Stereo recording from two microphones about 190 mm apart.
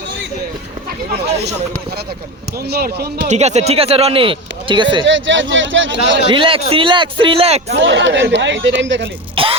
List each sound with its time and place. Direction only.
2.6 s speech: 55° right (ahead or behind)
3.2 s speech: 35° right (ahead or behind)
5.0 s speech: 75° right (ahead or behind)
6.2 s a man's voice: 25° right (ahead or behind)
7.7 s speech: 75° right (ahead or behind)
9.3 s a man's voice: 30° right (ahead or behind)